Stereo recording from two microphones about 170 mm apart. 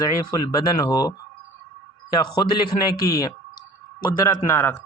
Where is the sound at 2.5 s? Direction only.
20° left (ahead or behind).